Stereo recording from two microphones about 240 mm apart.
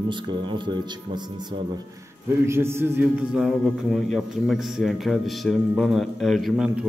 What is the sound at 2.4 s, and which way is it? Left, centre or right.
A man's voice, centre.